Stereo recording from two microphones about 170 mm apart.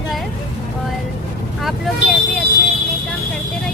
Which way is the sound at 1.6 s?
Centre (ahead or behind).